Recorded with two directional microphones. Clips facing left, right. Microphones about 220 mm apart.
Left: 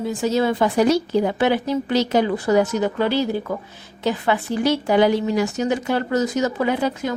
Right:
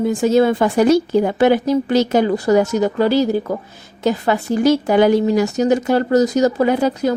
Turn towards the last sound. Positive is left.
turn(degrees=-45)  # may be behind; listen again after turning